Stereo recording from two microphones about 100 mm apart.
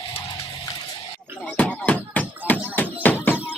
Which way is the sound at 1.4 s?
15° left (ahead or behind).